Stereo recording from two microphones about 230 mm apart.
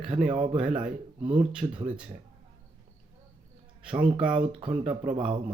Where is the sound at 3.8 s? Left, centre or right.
Centre.